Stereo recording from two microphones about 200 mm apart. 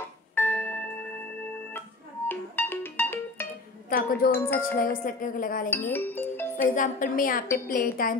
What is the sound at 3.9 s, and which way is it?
A woman's voice, 50° left (ahead or behind).